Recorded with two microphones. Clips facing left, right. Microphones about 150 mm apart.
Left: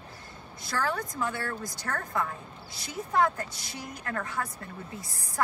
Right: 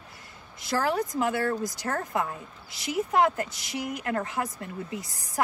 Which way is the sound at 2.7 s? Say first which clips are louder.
Right 9 dB; 90° right.